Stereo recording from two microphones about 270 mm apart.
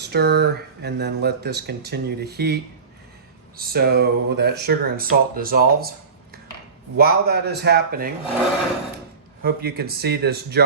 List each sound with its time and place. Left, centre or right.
0.1 s speech: right
3.6 s speech: right
6.9 s speech: right
9.4 s speech: right